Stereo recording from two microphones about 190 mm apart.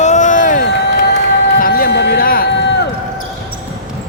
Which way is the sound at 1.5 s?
50° left (ahead or behind).